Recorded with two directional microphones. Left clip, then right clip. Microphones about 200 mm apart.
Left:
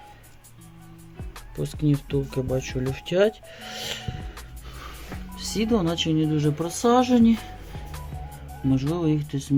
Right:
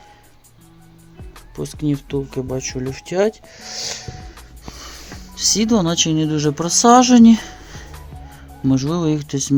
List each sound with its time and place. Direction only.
1.5 s speech: centre (ahead or behind)
5.4 s speech: 15° right (ahead or behind); by 7.5 s 30° right (ahead or behind)
9.0 s speech: 25° right (ahead or behind)